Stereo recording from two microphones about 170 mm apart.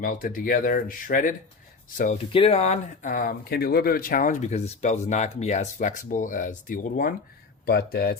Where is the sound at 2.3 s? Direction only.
35° left (ahead or behind); by 7.1 s 55° left (ahead or behind).